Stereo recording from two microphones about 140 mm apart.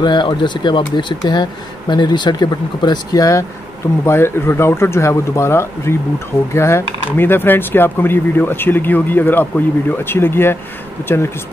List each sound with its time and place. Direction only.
0.0 s speech: 35° left (ahead or behind)